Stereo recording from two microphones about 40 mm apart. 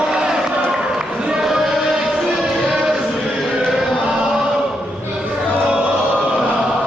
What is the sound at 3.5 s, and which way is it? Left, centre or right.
Chant, centre.